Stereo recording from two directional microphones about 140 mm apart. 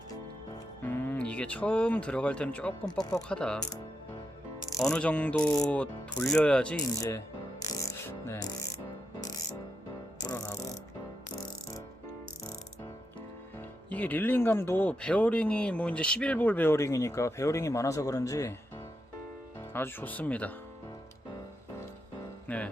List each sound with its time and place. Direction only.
0.9 s speech: 15° left (ahead or behind)
4.9 s speech: 10° left (ahead or behind)
6.9 s speech: 25° left (ahead or behind)
7.6 s music: 25° left (ahead or behind)
10.2 s music: 25° left (ahead or behind)
13.9 s speech: 10° left (ahead or behind)
19.7 s speech: 15° left (ahead or behind)
22.4 s music: 10° left (ahead or behind)